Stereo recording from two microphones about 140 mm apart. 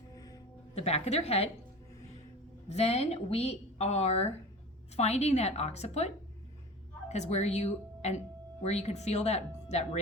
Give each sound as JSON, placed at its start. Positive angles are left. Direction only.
{"t": 0.1, "sound": "music", "side_deg": 25}
{"t": 0.8, "sound": "a woman's voice", "side_deg": 50}
{"t": 2.6, "sound": "a woman's voice", "side_deg": 50}
{"t": 7.1, "sound": "a woman's voice", "side_deg": 50}